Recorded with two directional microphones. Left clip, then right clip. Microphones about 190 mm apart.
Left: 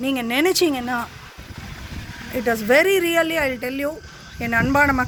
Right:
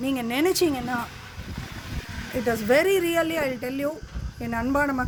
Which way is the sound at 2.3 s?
Centre (ahead or behind).